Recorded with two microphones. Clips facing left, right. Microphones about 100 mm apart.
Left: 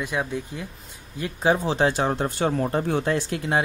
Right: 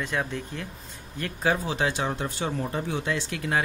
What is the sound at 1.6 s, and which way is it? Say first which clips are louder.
Speech: left 5 dB; 35° left (ahead or behind).